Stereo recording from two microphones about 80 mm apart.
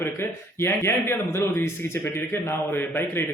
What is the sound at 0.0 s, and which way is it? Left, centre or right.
A man's voice, left.